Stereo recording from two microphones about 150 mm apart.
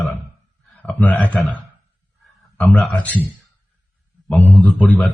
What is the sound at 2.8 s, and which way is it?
Speech, 10° left (ahead or behind).